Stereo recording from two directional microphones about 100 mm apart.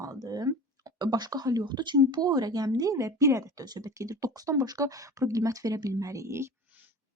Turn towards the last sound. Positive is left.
turn(degrees=-30)  # may be behind; listen again after turning